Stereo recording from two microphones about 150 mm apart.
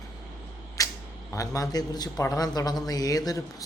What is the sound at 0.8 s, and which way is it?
Camera, 20° left (ahead or behind).